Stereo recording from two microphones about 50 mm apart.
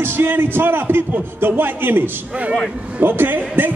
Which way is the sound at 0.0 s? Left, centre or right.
Right.